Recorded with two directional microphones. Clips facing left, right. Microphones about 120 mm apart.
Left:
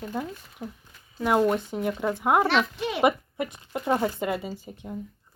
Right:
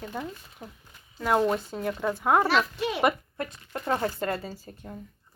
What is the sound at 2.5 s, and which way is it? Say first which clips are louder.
Speech: left 1 dB; centre (ahead or behind).